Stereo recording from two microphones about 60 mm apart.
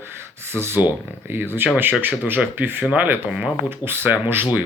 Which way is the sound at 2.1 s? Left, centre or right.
Right.